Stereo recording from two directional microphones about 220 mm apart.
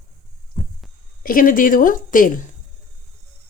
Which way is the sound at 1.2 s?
40° left (ahead or behind).